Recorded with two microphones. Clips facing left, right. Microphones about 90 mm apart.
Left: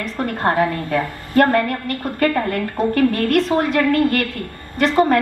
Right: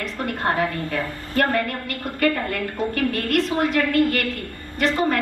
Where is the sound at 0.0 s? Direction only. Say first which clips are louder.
Left 4 dB; 40° left (ahead or behind).